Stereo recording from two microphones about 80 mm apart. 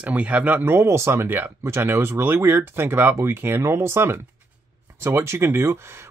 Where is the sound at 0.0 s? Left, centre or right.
Centre.